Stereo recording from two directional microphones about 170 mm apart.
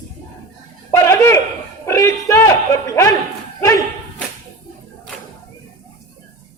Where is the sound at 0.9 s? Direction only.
15° left (ahead or behind).